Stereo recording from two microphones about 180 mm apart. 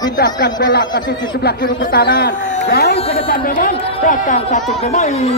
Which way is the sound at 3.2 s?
50° left (ahead or behind).